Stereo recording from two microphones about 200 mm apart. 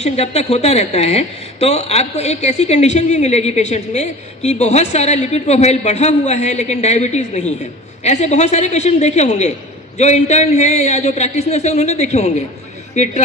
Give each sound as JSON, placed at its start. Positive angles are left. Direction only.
{"t": 0.0, "sound": "a man's voice", "side_deg": 30}